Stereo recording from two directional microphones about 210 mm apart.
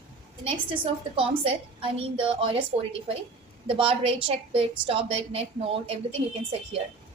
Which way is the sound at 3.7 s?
25° right (ahead or behind).